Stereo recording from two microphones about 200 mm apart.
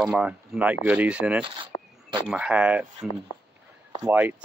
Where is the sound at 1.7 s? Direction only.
25° left (ahead or behind).